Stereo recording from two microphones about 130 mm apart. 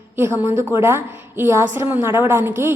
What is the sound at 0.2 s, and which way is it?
A woman's voice, 20° right (ahead or behind).